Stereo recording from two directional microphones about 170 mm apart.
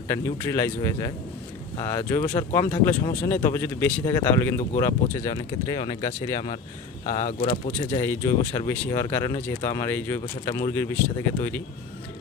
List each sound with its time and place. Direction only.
0.1 s speech: 15° left (ahead or behind)
7.2 s speech: 45° left (ahead or behind)
8.0 s speech: 15° left (ahead or behind)